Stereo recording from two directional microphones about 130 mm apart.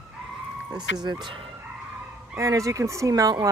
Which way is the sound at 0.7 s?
30° right (ahead or behind).